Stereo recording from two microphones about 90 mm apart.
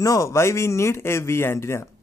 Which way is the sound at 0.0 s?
40° left (ahead or behind).